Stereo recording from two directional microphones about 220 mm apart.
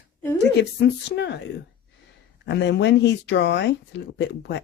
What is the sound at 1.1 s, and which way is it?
Speech, 50° left (ahead or behind).